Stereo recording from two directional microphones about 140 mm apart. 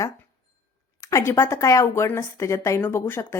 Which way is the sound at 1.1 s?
15° left (ahead or behind).